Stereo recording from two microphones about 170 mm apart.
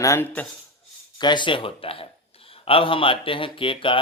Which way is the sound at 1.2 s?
25° left (ahead or behind).